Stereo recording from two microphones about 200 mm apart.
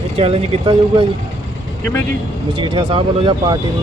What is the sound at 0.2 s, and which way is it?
Speech, 30° right (ahead or behind).